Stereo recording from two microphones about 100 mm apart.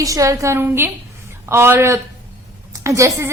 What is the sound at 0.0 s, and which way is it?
A woman's voice, 35° right (ahead or behind).